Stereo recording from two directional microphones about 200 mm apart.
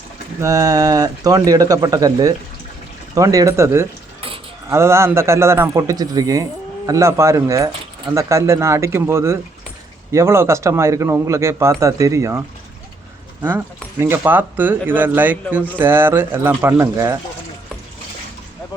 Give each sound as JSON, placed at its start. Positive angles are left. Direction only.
{"t": 0.4, "sound": "speech", "side_deg": -15}
{"t": 14.0, "sound": "speech", "side_deg": -10}